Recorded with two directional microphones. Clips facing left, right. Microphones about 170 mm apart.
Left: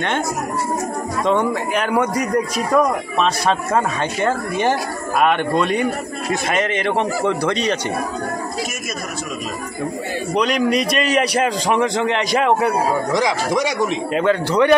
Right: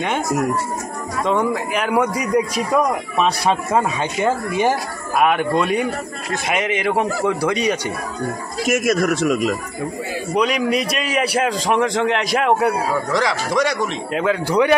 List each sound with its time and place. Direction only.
1.2 s a man's voice: 5° right (ahead or behind)
8.6 s a man's voice: 80° right
10.3 s a man's voice: 5° right (ahead or behind)
13.1 s speech: 15° left (ahead or behind)
14.1 s a man's voice: 5° right (ahead or behind)